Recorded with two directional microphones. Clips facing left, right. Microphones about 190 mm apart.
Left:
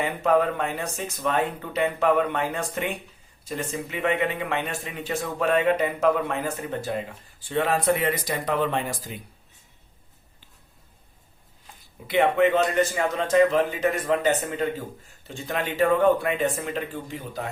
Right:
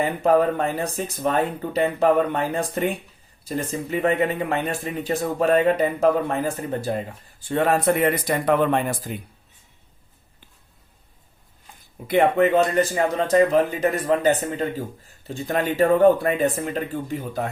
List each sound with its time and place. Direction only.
0.0 s a man's voice: 35° right (ahead or behind)
7.4 s speech: 50° right (ahead or behind)
12.0 s a man's voice: 45° right (ahead or behind)